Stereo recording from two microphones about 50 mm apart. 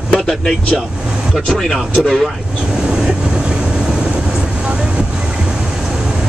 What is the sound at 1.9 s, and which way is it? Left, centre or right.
Speech, centre.